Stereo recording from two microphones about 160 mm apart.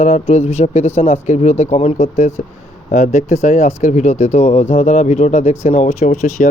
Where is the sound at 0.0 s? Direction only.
45° left (ahead or behind).